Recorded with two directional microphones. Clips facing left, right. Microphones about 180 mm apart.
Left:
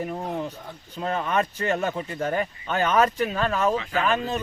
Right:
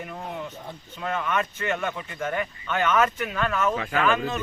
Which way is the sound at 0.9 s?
35° left (ahead or behind).